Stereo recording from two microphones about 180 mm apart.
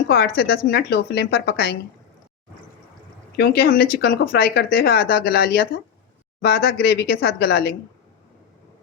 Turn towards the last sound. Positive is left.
turn(degrees=60)  # may be behind; listen again after turning